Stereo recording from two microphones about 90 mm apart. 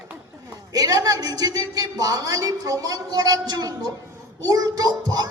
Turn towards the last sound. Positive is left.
turn(degrees=-45)  # may be behind; listen again after turning